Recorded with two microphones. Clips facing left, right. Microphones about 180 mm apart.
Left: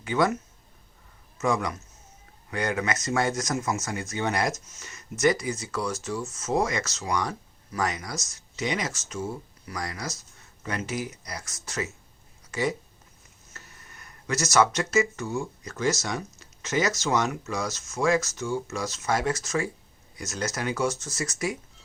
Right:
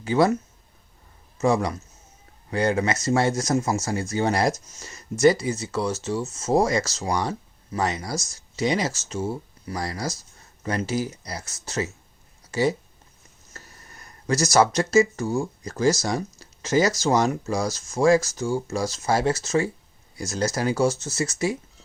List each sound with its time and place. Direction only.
0.0 s speech: 30° right (ahead or behind)
1.4 s speech: 30° right (ahead or behind)